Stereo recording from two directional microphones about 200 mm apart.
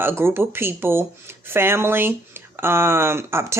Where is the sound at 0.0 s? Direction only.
10° right (ahead or behind).